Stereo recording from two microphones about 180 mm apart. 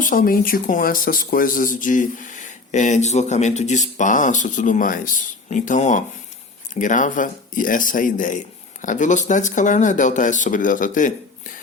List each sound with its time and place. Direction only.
0.0 s speech: 50° left (ahead or behind)